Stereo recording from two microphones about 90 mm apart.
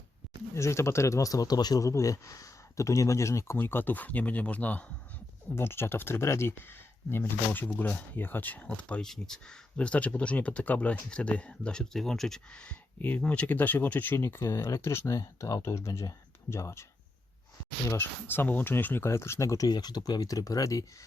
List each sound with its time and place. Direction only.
0.5 s speech: 30° left (ahead or behind)
17.9 s speech: 25° left (ahead or behind)
19.7 s speech: 50° left (ahead or behind)